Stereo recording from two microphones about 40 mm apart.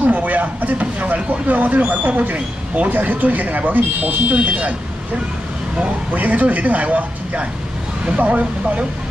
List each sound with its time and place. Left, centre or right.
0.0 s vehicle: right
2.9 s speech: right
6.1 s speech: right